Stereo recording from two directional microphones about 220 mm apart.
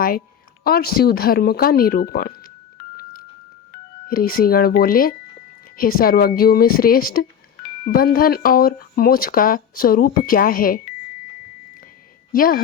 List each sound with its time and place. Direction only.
0.6 s speech: 45° left (ahead or behind)
3.0 s a sound: 40° left (ahead or behind)
4.1 s speech: 40° left (ahead or behind)
12.3 s speech: 40° left (ahead or behind)